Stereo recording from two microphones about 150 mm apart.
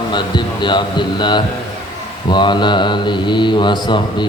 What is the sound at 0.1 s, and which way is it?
Speech, 30° left (ahead or behind).